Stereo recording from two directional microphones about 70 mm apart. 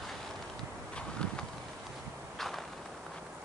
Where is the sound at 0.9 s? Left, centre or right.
Centre.